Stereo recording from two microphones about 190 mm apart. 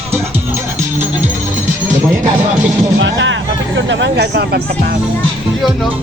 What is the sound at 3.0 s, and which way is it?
Speech, 75° right (ahead or behind).